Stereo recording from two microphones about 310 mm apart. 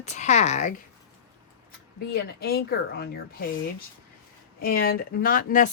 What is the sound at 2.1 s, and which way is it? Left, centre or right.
Speech, left.